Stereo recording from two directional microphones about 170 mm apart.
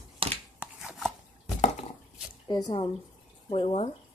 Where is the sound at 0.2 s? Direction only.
35° right (ahead or behind).